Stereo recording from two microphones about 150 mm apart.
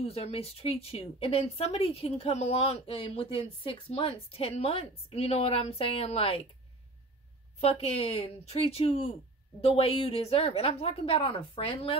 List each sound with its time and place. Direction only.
0.0 s speech: 40° left (ahead or behind)
7.6 s speech: 40° left (ahead or behind)